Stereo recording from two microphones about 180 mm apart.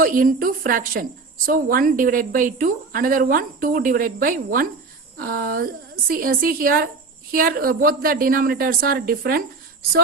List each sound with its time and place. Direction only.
0.0 s a woman's voice: 50° right (ahead or behind)